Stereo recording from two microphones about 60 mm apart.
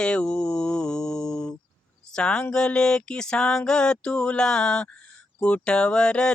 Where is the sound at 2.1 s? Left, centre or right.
Centre.